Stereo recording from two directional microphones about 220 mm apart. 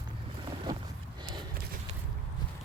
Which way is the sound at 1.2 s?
20° right (ahead or behind).